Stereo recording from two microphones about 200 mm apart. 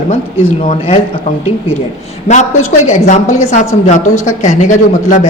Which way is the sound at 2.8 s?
35° left (ahead or behind).